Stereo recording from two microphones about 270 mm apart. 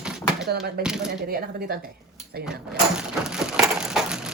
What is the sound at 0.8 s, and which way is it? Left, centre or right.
Speech, right.